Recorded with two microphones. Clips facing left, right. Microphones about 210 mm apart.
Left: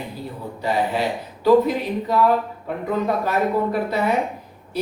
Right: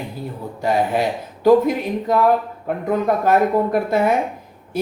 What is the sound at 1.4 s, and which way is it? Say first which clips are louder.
Speech: right 2 dB; 50° right (ahead or behind).